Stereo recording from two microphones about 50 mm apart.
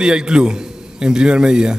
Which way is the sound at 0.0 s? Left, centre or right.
Centre.